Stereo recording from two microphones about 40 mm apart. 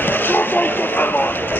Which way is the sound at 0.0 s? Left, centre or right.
Left.